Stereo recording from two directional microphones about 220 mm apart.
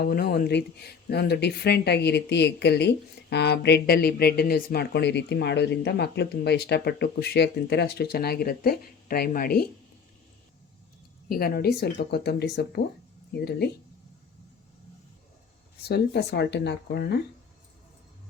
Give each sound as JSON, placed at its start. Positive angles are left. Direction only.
{"t": 0.0, "sound": "speech", "side_deg": 45}
{"t": 11.3, "sound": "speech", "side_deg": 45}
{"t": 15.9, "sound": "speech", "side_deg": 50}